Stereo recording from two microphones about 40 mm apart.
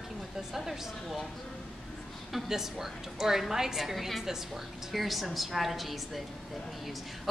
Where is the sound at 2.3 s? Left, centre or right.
Centre.